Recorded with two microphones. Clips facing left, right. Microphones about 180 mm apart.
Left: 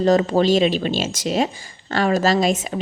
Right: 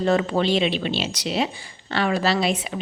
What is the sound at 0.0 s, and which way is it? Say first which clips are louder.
A woman's voice: left 4 dB; 40° left (ahead or behind).